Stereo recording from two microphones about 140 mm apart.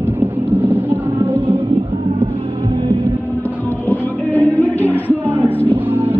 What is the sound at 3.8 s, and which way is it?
Music, 10° left (ahead or behind).